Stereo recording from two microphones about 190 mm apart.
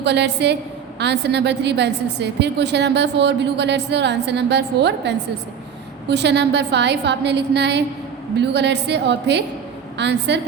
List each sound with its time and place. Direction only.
0.0 s a woman's voice: 65° right (ahead or behind)